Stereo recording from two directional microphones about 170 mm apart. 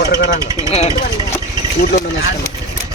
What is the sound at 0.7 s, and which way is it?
Speech, 40° left (ahead or behind).